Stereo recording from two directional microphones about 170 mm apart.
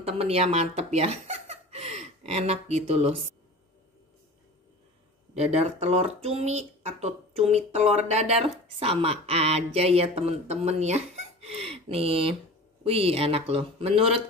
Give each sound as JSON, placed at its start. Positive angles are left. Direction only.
{"t": 0.0, "sound": "speech", "side_deg": -35}
{"t": 5.3, "sound": "speech", "side_deg": -40}